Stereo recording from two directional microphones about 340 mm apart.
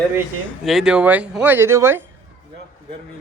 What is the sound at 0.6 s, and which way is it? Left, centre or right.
A man's voice, centre.